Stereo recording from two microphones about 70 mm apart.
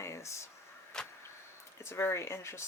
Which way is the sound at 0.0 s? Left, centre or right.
Left.